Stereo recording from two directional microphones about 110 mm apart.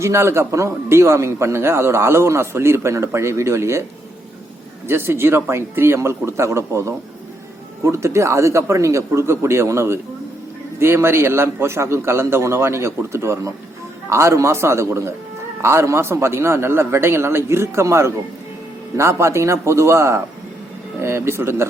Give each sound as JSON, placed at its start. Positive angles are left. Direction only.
{"t": 0.0, "sound": "a man's voice", "side_deg": -25}
{"t": 4.9, "sound": "a man's voice", "side_deg": -20}